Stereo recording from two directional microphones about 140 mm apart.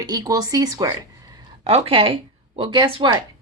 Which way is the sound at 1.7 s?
45° right (ahead or behind).